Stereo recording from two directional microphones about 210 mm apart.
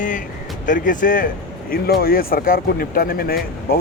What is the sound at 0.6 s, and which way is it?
Speech, 40° left (ahead or behind).